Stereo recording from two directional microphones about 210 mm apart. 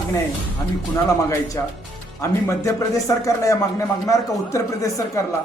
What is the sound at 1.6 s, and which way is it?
A man's voice, 10° left (ahead or behind).